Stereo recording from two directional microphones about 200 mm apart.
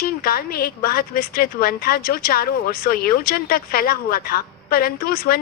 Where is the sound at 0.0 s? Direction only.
50° left (ahead or behind).